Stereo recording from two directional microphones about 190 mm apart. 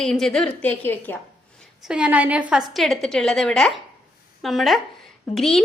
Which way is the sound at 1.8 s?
5° right (ahead or behind).